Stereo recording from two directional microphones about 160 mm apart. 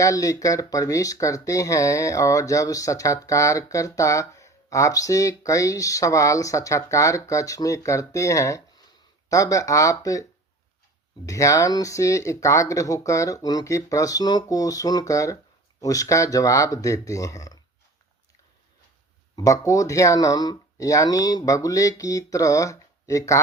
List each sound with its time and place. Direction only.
0.0 s speech: 20° left (ahead or behind)
11.3 s speech: 20° left (ahead or behind)
19.4 s speech: 20° left (ahead or behind)